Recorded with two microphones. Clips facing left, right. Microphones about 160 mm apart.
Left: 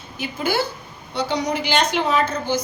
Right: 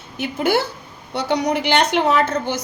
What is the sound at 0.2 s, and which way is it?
A woman's voice, 65° right (ahead or behind).